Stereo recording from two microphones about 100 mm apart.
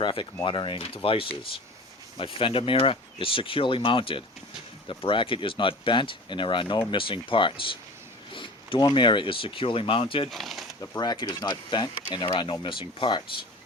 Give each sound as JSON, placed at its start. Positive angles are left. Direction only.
{"t": 0.0, "sound": "speech", "side_deg": 55}
{"t": 10.2, "sound": "speech", "side_deg": 0}
{"t": 10.8, "sound": "speech", "side_deg": 40}
{"t": 12.4, "sound": "speech", "side_deg": 55}